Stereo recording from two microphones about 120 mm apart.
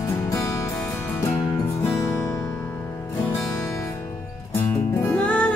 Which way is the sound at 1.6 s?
20° left (ahead or behind).